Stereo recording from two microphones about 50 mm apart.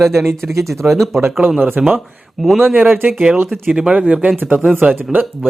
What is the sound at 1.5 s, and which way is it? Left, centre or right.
Speech, right.